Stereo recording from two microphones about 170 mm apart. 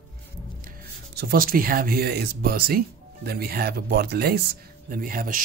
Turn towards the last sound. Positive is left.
turn(degrees=-55)  # may be behind; listen again after turning